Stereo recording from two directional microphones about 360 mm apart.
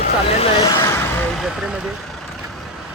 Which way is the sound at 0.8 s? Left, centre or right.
Centre.